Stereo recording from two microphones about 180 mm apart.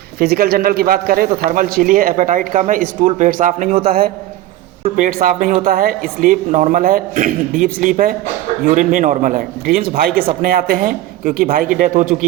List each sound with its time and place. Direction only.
0.2 s a man's voice: 60° right (ahead or behind)
4.9 s a man's voice: 50° right (ahead or behind)